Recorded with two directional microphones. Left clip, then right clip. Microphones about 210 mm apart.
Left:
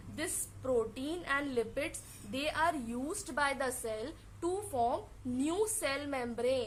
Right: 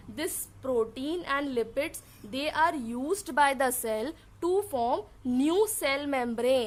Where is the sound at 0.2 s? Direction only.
40° right (ahead or behind).